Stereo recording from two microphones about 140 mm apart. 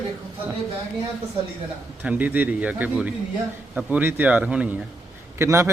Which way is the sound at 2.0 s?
10° right (ahead or behind).